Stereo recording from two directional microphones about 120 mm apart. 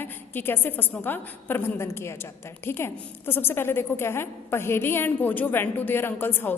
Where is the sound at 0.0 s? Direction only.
20° left (ahead or behind).